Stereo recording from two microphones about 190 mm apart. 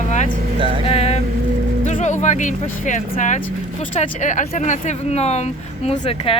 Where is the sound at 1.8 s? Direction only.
40° left (ahead or behind).